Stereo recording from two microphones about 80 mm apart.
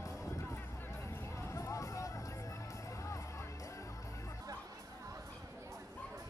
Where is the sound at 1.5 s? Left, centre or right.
Left.